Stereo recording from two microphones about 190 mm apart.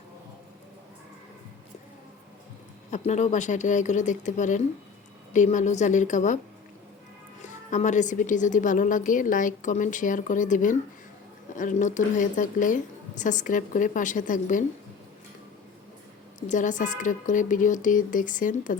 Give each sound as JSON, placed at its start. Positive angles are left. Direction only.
{"t": 2.9, "sound": "speech", "side_deg": 35}
{"t": 7.4, "sound": "speech", "side_deg": 40}
{"t": 16.5, "sound": "speech", "side_deg": 40}